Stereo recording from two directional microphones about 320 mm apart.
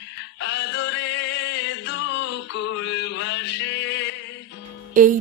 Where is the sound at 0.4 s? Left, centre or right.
Left.